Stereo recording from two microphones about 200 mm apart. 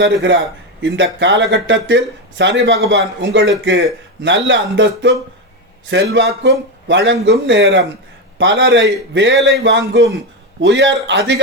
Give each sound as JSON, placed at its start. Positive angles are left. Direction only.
{"t": 0.0, "sound": "speech", "side_deg": -60}